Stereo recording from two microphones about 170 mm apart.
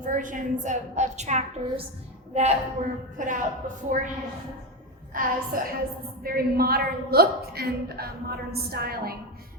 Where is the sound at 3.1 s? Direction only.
50° right (ahead or behind).